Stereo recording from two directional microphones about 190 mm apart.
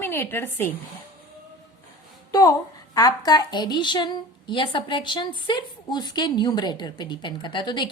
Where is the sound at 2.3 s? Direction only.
20° left (ahead or behind).